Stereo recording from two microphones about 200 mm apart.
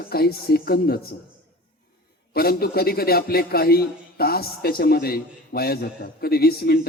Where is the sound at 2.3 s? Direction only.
50° left (ahead or behind).